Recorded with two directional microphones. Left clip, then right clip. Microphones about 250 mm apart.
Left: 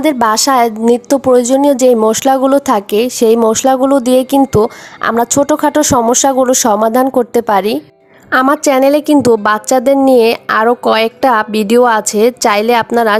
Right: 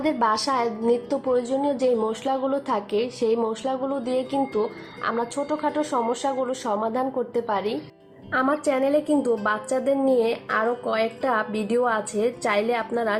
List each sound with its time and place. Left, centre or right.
0.0 s a woman's voice: left